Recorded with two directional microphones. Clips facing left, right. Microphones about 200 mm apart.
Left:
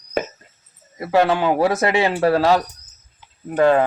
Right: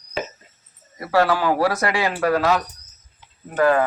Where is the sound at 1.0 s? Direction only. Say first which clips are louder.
Left 2 dB; 20° left (ahead or behind).